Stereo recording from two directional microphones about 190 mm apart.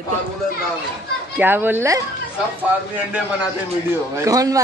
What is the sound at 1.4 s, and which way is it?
Speech, 10° right (ahead or behind).